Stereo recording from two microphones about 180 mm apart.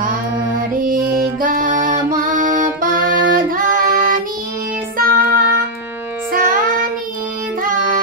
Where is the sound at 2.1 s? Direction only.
50° right (ahead or behind).